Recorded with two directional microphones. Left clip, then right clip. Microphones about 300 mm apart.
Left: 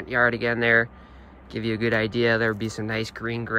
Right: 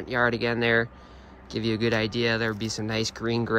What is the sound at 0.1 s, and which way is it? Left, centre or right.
Speech, centre.